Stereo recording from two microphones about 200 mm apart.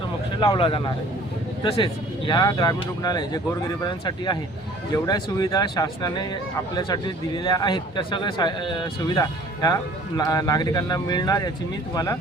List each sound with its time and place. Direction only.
0.3 s a man's voice: 25° left (ahead or behind)